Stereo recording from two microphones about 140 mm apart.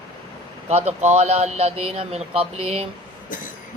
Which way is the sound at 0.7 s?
50° right (ahead or behind).